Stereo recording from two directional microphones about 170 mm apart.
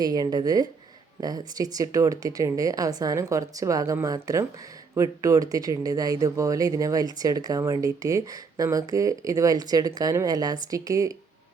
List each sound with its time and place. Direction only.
0.0 s speech: 25° right (ahead or behind)